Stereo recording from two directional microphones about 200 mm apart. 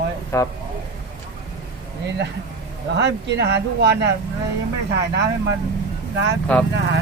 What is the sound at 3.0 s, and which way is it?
Speech, 60° right (ahead or behind).